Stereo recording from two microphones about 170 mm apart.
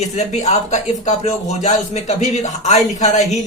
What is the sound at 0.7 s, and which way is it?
Speech, 40° left (ahead or behind).